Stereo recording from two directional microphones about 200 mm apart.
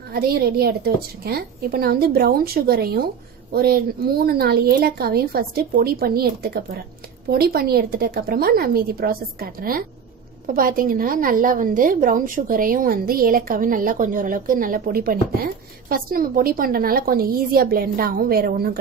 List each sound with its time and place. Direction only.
0.1 s a woman's voice: 50° right (ahead or behind)